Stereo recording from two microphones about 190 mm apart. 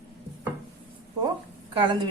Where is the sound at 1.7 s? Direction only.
25° right (ahead or behind).